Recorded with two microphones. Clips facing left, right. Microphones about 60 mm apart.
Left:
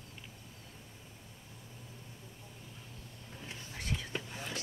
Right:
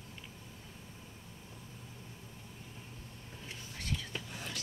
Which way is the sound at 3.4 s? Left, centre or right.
Left.